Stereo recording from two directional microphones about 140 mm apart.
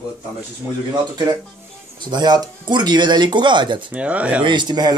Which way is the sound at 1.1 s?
30° right (ahead or behind).